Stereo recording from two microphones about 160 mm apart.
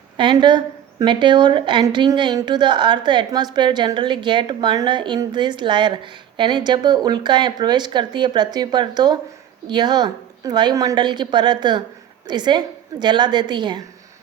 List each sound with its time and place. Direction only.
0.2 s a woman's voice: 30° right (ahead or behind)